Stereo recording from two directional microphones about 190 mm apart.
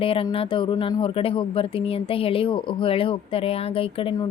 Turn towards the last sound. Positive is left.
turn(degrees=25)  # may be behind; listen again after turning